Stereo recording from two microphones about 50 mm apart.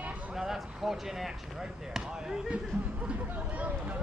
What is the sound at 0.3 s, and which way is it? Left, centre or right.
Speech, centre.